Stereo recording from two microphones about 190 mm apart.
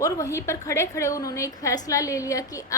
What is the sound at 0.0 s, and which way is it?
A woman's voice, 15° left (ahead or behind).